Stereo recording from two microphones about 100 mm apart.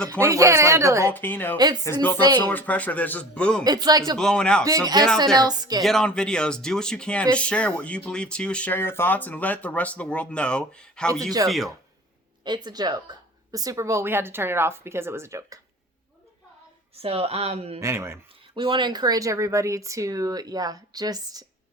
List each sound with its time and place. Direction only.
0.2 s speech: 30° right (ahead or behind)
1.0 s a woman's voice: 20° left (ahead or behind)
1.5 s speech: 45° right (ahead or behind)
2.5 s speech: 15° left (ahead or behind)
3.6 s speech: 40° right (ahead or behind)
4.2 s speech: 5° left (ahead or behind)
4.6 s speech: 35° right (ahead or behind)
5.8 s speech: 5° left (ahead or behind)
12.5 s a woman's voice: 45° right (ahead or behind); by 15.5 s 30° right (ahead or behind)
17.0 s speech: 75° right (ahead or behind)
17.7 s a woman's voice: 30° right (ahead or behind)
18.5 s speech: 50° right (ahead or behind)